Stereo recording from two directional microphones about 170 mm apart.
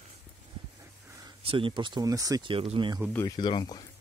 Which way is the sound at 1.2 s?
30° right (ahead or behind).